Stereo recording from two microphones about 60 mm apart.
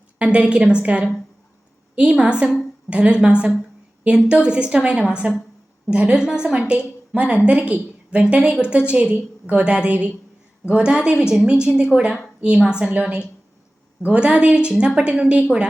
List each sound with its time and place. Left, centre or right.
0.2 s a woman's voice: centre